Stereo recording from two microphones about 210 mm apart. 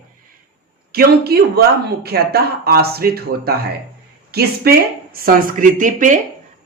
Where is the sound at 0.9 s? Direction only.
45° right (ahead or behind).